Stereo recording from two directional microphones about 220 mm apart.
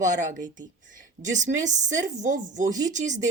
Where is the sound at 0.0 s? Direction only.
35° right (ahead or behind).